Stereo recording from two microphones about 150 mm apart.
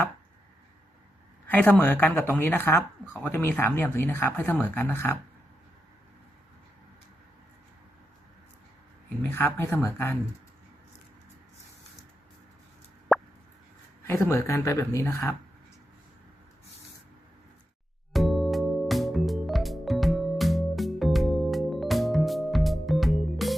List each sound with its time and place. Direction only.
1.5 s speech: 10° left (ahead or behind)
9.3 s speech: 15° left (ahead or behind)
13.1 s a sound: centre (ahead or behind)
14.1 s speech: 20° left (ahead or behind)
18.1 s music: centre (ahead or behind)